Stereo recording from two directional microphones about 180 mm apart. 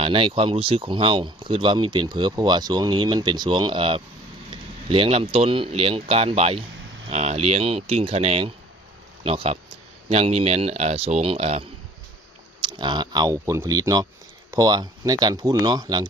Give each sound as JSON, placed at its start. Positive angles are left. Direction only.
{"t": 0.0, "sound": "speech", "side_deg": -30}
{"t": 12.6, "sound": "speech", "side_deg": -25}